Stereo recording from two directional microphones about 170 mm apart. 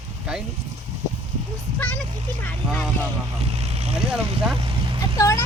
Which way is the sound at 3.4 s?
40° right (ahead or behind).